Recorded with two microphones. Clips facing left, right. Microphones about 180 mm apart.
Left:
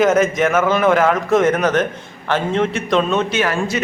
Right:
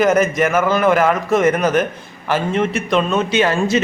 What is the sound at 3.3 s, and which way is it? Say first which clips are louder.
Speech: right 3 dB; 20° right (ahead or behind).